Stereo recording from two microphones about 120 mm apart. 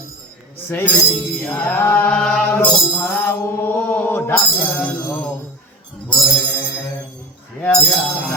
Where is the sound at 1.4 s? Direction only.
10° left (ahead or behind).